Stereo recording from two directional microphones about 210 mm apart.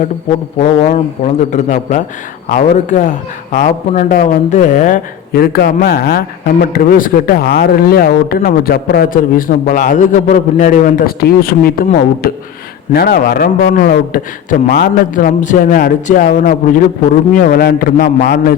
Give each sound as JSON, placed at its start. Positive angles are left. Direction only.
{"t": 0.6, "sound": "a man's voice", "side_deg": 30}